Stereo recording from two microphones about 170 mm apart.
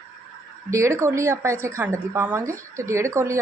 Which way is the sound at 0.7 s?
15° right (ahead or behind).